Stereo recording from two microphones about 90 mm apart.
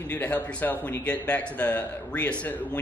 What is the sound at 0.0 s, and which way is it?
A man's voice, 20° left (ahead or behind).